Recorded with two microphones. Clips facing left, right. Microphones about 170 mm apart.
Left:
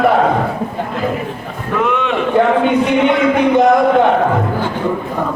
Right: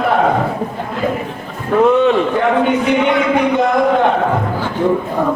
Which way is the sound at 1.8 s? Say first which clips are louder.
Right 7 dB; 35° right (ahead or behind).